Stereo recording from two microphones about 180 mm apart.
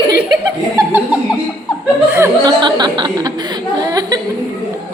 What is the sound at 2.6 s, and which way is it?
A woman's voice, 25° right (ahead or behind).